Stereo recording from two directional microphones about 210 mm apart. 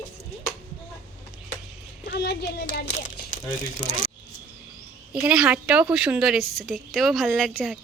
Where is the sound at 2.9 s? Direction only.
35° left (ahead or behind).